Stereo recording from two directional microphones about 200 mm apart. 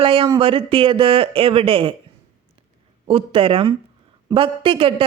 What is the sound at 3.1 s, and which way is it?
Speech, 25° right (ahead or behind).